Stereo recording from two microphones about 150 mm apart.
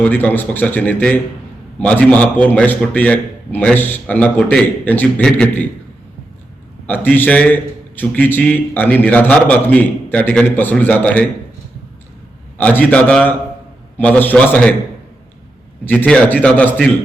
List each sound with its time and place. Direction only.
0.0 s a man's voice: 10° left (ahead or behind)
6.8 s a man's voice: 10° left (ahead or behind)
12.5 s a man's voice: 10° left (ahead or behind)
15.9 s a man's voice: 10° left (ahead or behind)